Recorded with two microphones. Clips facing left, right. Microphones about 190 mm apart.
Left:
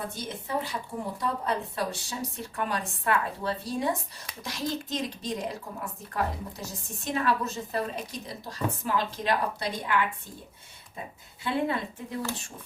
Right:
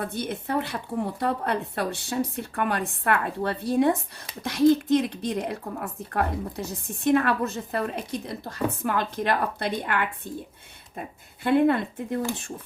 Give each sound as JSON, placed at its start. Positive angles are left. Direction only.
{"t": 0.0, "sound": "a woman's voice", "side_deg": -60}
{"t": 11.4, "sound": "a woman's voice", "side_deg": -55}